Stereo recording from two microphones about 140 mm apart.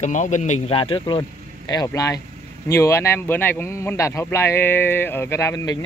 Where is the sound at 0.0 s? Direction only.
60° left (ahead or behind).